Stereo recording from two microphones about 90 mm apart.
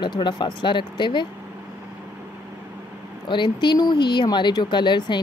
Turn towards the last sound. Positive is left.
turn(degrees=60)  # may be behind; listen again after turning